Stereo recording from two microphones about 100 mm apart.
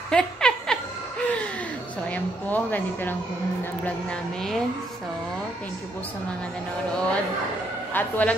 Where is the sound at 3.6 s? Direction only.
15° left (ahead or behind).